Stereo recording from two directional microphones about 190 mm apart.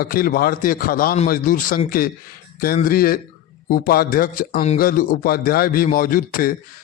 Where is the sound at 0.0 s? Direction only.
50° left (ahead or behind).